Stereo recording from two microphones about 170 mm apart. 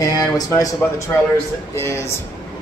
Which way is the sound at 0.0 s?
20° left (ahead or behind).